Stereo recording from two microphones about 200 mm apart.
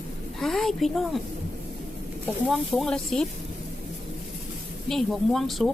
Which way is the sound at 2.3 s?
Centre (ahead or behind).